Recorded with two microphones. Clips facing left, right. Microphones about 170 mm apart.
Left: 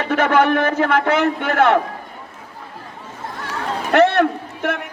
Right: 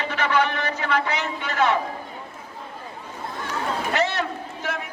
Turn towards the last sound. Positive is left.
turn(degrees=60)  # may be behind; listen again after turning